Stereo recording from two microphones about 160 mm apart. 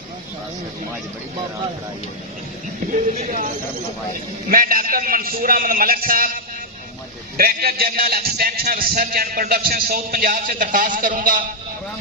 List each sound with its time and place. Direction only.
2.9 s a man's voice: 50° right (ahead or behind)